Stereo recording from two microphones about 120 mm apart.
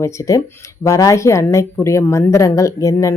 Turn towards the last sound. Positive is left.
turn(degrees=25)  # may be behind; listen again after turning